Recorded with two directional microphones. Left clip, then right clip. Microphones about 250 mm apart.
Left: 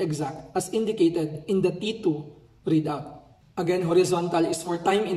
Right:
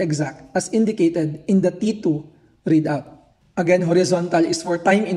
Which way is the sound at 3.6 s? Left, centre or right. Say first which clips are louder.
Right 5 dB; right.